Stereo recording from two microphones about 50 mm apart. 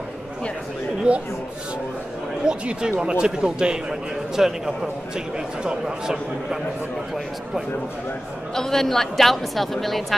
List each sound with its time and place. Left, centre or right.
1.1 s speech: right
2.4 s a man's voice: centre
8.5 s a woman's voice: centre